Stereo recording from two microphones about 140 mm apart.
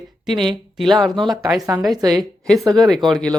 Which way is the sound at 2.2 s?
Centre (ahead or behind).